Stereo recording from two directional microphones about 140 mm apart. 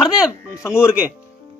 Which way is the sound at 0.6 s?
20° left (ahead or behind).